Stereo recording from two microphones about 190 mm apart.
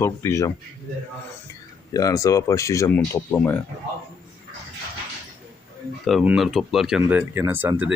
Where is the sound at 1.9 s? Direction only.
20° left (ahead or behind).